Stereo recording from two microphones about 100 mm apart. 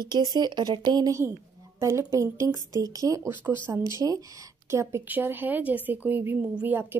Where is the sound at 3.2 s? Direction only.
20° right (ahead or behind).